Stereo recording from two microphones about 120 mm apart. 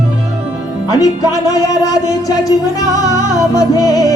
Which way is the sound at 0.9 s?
30° left (ahead or behind).